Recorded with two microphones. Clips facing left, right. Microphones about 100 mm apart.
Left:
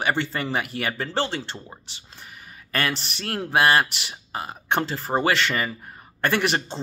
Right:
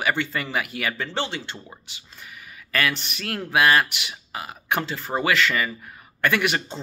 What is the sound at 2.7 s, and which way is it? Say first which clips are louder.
A man's voice: right 1 dB; 30° left (ahead or behind).